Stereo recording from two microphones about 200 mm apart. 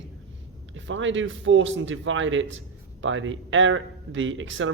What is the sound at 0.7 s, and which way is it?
Speech, 70° right (ahead or behind).